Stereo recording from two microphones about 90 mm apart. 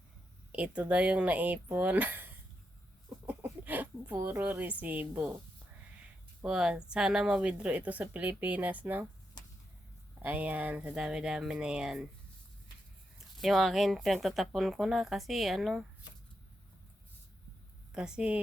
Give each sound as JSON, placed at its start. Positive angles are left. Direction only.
{"t": 0.5, "sound": "speech", "side_deg": -15}
{"t": 3.2, "sound": "chicken", "side_deg": -20}
{"t": 4.8, "sound": "a woman's voice", "side_deg": -20}
{"t": 6.4, "sound": "speech", "side_deg": -10}
{"t": 10.2, "sound": "speech", "side_deg": -20}
{"t": 13.1, "sound": "speech", "side_deg": 0}
{"t": 17.9, "sound": "speech", "side_deg": -10}